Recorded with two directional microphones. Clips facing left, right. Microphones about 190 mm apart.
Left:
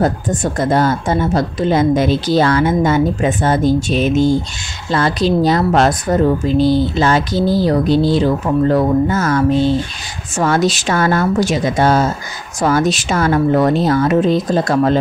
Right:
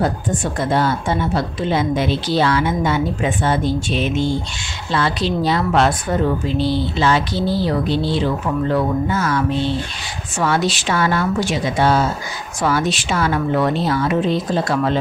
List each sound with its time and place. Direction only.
0.0 s a woman's voice: 45° left (ahead or behind)